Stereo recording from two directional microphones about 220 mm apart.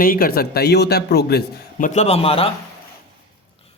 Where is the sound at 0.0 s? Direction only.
40° left (ahead or behind).